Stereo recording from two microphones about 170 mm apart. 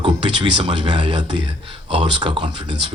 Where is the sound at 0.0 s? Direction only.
30° right (ahead or behind).